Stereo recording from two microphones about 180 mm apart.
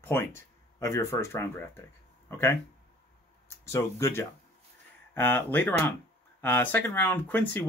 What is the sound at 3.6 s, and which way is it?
Speech, 15° left (ahead or behind).